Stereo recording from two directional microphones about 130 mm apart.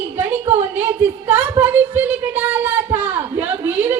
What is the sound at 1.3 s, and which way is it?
Child singing, 15° right (ahead or behind).